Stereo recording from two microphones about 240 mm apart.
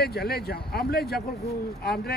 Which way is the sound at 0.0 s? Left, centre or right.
Left.